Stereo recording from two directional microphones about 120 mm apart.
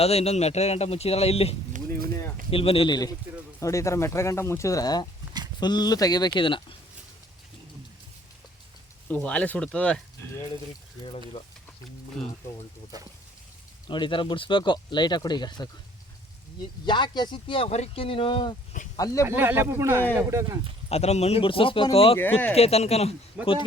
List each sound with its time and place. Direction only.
0.0 s speech: 60° left (ahead or behind)
2.9 s speech: 30° left (ahead or behind)
9.0 s speech: 15° left (ahead or behind)
11.0 s speech: 55° left (ahead or behind)
12.2 s speech: 5° left (ahead or behind)
13.8 s speech: 40° left (ahead or behind)
16.8 s speech: 40° left (ahead or behind)
17.7 s speech: 60° left (ahead or behind)
18.9 s speech: 30° left (ahead or behind)
19.2 s speech: 20° right (ahead or behind)
20.9 s speech: 65° left (ahead or behind)
22.2 s speech: 15° left (ahead or behind)
22.5 s speech: 60° left (ahead or behind)
23.4 s speech: 10° right (ahead or behind)